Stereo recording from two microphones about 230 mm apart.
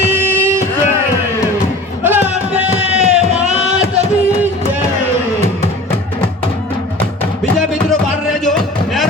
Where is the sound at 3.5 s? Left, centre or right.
Right.